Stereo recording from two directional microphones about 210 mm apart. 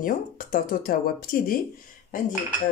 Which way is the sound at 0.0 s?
40° left (ahead or behind).